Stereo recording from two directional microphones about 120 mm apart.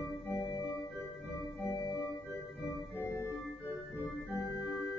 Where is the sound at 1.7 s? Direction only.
35° left (ahead or behind).